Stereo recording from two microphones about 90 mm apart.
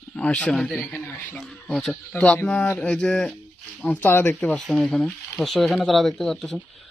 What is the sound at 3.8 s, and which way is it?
Speech, 20° left (ahead or behind).